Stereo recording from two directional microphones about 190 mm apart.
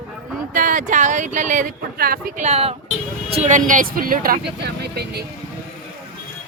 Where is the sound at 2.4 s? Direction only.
30° right (ahead or behind); by 4.4 s 50° right (ahead or behind).